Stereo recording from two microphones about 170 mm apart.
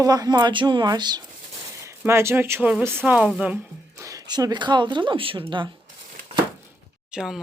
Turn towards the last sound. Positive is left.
turn(degrees=-5)  # may be behind; listen again after turning